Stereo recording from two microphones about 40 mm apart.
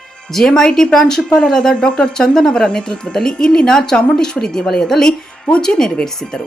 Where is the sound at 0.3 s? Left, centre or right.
Centre.